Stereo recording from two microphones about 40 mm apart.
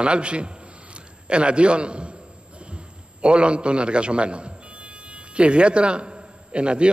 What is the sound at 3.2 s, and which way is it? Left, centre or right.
A man's voice, right.